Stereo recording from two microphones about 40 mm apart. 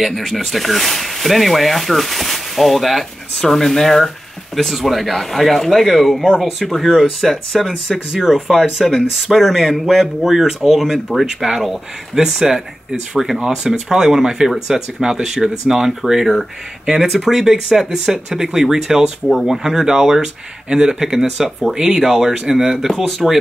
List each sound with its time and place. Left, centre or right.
0.0 s speech: centre
8.1 s speech: centre
16.8 s speech: centre
19.2 s speech: centre